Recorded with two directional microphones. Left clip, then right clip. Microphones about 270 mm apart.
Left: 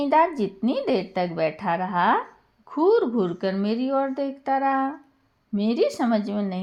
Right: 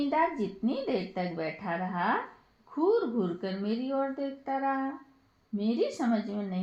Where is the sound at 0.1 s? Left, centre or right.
Left.